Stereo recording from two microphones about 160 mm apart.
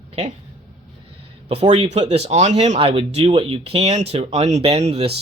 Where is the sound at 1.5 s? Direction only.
35° right (ahead or behind).